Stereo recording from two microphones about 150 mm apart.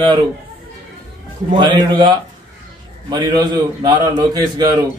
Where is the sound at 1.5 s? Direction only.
30° right (ahead or behind).